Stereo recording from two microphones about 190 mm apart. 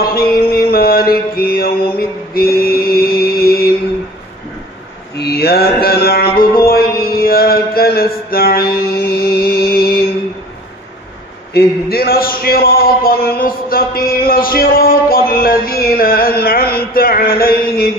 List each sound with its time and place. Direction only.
0.0 s mantra: 50° left (ahead or behind)
5.1 s mantra: 60° left (ahead or behind)
11.5 s a man's voice: 55° left (ahead or behind)